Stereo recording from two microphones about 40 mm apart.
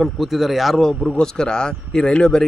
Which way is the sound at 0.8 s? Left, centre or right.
Centre.